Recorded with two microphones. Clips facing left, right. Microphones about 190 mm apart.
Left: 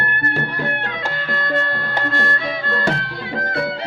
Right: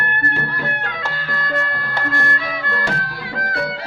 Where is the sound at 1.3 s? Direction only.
25° left (ahead or behind).